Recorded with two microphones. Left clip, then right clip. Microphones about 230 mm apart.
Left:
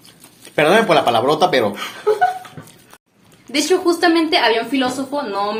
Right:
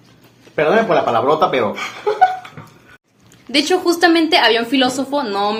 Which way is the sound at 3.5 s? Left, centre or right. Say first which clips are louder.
Right 1 dB; right.